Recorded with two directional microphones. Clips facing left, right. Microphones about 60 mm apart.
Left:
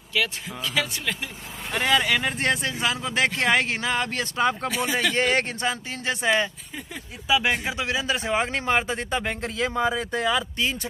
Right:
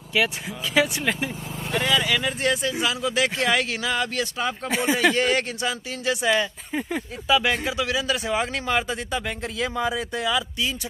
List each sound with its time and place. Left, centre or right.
0.1 s speech: centre
1.7 s speech: left
4.6 s speech: right
5.1 s speech: left
7.2 s a man's voice: centre
7.5 s speech: left